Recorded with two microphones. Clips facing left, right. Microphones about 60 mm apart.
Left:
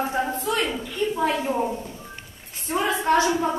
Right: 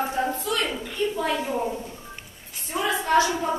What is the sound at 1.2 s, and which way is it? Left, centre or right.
Speech, left.